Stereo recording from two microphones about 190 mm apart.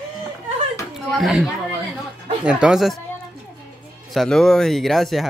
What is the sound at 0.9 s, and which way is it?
A man's voice, centre (ahead or behind).